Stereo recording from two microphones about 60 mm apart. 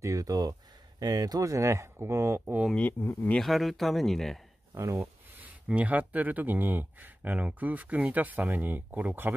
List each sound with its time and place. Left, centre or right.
0.0 s speech: right
2.9 s speech: left
3.3 s speech: centre
4.7 s speech: right
5.7 s speech: right